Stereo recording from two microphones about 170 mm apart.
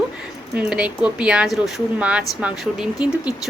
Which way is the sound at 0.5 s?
5° right (ahead or behind).